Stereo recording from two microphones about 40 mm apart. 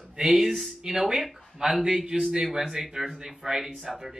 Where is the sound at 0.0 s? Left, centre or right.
Right.